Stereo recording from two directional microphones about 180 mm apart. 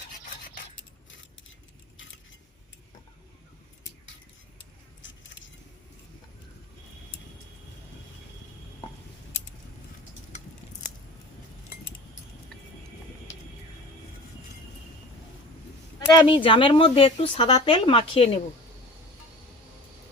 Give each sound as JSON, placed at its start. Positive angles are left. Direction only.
{"t": 5.0, "sound": "keys jangling", "side_deg": 90}
{"t": 16.0, "sound": "a woman's voice", "side_deg": 25}